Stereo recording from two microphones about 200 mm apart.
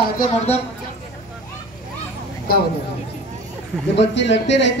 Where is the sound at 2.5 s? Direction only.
50° left (ahead or behind).